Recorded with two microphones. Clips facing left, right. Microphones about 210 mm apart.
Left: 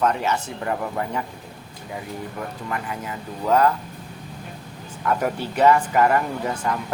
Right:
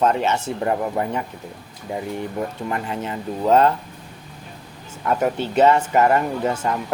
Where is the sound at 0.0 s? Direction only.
25° right (ahead or behind).